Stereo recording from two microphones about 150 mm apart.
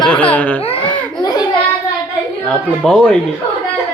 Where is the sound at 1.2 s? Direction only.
25° left (ahead or behind).